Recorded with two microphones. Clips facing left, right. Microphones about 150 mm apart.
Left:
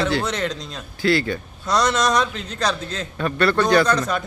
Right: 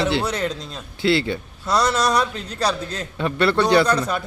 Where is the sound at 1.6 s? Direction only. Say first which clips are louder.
Even; 5° right (ahead or behind).